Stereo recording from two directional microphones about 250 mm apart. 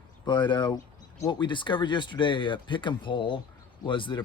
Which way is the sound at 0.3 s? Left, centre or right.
Centre.